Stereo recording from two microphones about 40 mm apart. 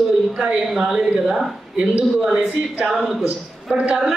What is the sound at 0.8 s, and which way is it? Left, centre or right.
Speech, centre.